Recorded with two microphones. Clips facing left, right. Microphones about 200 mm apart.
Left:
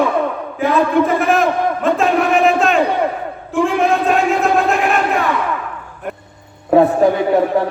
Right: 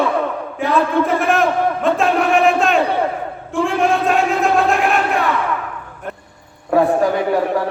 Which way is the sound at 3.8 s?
Centre (ahead or behind).